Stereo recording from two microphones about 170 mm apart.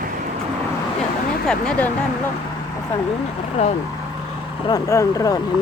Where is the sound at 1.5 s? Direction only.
5° left (ahead or behind).